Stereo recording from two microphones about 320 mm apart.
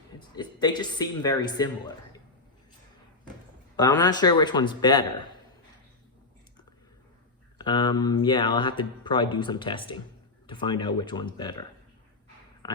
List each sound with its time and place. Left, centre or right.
0.3 s speech: centre
3.8 s speech: centre
7.6 s speech: centre
12.6 s a sound: centre